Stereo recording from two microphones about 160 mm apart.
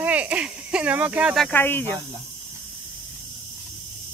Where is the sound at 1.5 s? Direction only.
15° left (ahead or behind).